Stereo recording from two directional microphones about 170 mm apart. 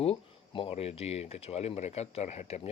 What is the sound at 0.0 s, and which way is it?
Speech, 35° left (ahead or behind).